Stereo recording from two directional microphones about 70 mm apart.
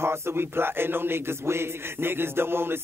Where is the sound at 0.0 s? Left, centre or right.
Right.